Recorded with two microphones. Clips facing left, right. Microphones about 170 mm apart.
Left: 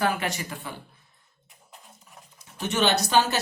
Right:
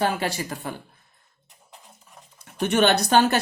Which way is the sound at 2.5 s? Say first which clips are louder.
Right 4 dB; 55° right (ahead or behind).